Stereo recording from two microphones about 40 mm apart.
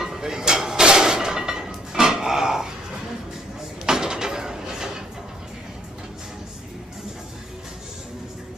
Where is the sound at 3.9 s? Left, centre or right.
Centre.